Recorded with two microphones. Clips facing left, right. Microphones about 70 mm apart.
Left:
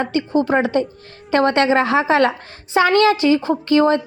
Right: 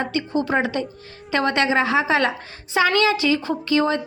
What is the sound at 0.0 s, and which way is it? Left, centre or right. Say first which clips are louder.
A woman's voice: left 5 dB; left.